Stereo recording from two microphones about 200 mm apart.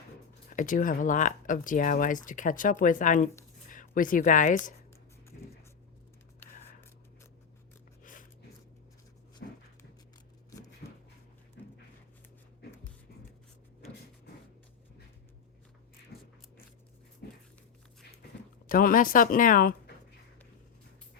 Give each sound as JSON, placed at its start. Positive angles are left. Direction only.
{"t": 0.5, "sound": "speech", "side_deg": 40}
{"t": 8.0, "sound": "a sound", "side_deg": 40}
{"t": 9.4, "sound": "dog", "side_deg": 55}
{"t": 10.8, "sound": "a sound", "side_deg": 45}
{"t": 17.2, "sound": "dog", "side_deg": 55}
{"t": 18.7, "sound": "speech", "side_deg": 45}